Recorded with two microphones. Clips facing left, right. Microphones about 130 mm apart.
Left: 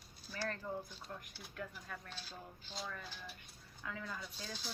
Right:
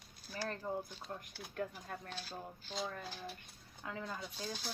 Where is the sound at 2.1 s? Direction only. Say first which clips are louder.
Right 5 dB; 50° right (ahead or behind).